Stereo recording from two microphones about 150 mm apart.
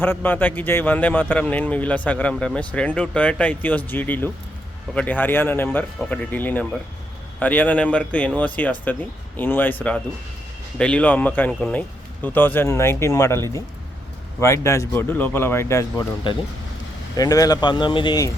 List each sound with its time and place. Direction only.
0.0 s speech: 15° left (ahead or behind)
17.2 s speech: 25° left (ahead or behind)